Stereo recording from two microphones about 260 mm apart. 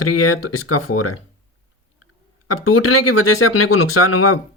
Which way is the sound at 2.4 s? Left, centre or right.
Left.